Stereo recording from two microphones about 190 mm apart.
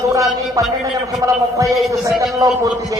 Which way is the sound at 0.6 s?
15° right (ahead or behind).